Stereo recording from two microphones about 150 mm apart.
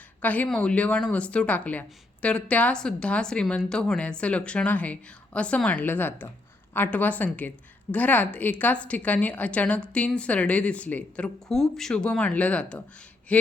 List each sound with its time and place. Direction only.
0.2 s a woman's voice: 10° left (ahead or behind)